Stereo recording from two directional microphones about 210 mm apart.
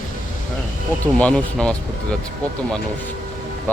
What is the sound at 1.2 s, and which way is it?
Speech, 5° left (ahead or behind).